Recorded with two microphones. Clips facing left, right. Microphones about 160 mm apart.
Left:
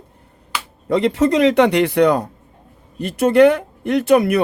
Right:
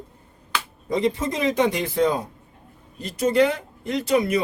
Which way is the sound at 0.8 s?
75° left (ahead or behind).